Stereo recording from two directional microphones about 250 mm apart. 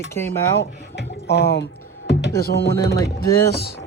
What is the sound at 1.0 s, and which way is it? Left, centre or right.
Speech, left.